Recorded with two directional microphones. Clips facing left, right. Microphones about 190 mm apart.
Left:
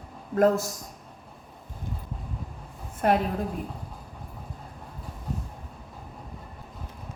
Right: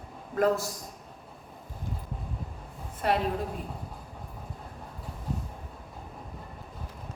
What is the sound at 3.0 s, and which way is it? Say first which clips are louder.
Speech: left 4 dB; 50° left (ahead or behind).